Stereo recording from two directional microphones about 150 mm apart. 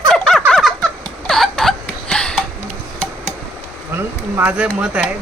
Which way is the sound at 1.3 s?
Centre (ahead or behind).